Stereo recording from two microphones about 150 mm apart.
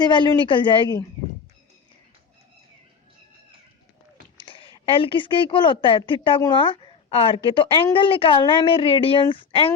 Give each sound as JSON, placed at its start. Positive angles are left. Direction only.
{"t": 0.0, "sound": "speech", "side_deg": 30}
{"t": 4.4, "sound": "a sound", "side_deg": 35}
{"t": 4.9, "sound": "speech", "side_deg": 35}